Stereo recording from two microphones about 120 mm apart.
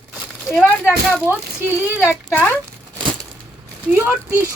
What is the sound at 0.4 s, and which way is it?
Speech, 5° right (ahead or behind).